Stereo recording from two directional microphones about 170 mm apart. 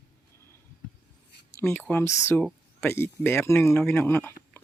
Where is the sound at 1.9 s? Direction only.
15° left (ahead or behind).